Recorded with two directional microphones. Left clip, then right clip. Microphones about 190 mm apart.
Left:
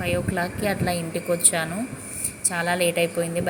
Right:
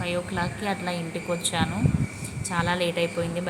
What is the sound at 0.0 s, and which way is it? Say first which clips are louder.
A woman's voice: left 3 dB; 10° left (ahead or behind).